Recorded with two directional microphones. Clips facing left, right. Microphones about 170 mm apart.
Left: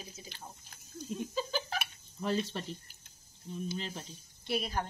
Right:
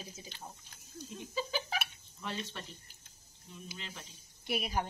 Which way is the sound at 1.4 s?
5° right (ahead or behind).